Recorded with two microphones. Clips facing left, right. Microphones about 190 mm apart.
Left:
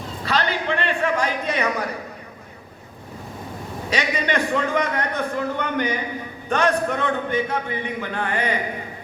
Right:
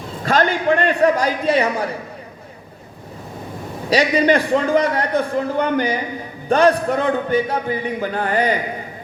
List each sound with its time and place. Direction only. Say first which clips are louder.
0.3 s a man's voice: right 7 dB; 45° right (ahead or behind); by 1.9 s 30° right (ahead or behind)
3.8 s a man's voice: right 9 dB; 35° right (ahead or behind)